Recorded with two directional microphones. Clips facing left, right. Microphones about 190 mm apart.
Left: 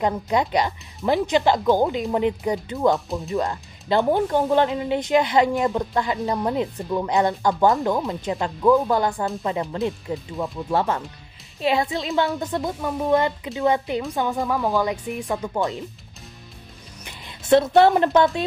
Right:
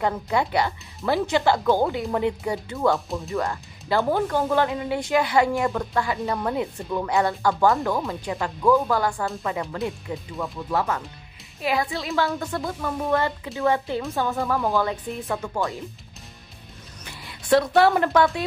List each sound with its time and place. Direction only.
0.0 s speech: 20° left (ahead or behind)
17.0 s speech: 20° left (ahead or behind)